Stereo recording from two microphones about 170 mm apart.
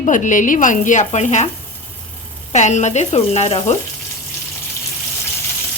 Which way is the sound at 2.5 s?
45° left (ahead or behind).